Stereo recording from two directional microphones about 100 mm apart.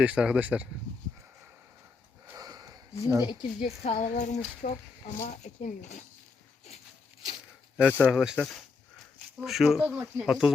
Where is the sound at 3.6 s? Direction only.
90° left.